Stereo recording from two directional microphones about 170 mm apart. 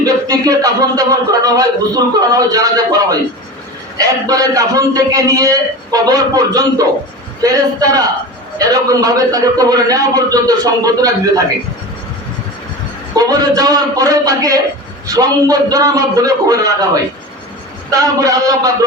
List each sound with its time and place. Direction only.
0.0 s a man's voice: 20° right (ahead or behind)
13.1 s a man's voice: 20° right (ahead or behind)
18.2 s a man's voice: 20° right (ahead or behind)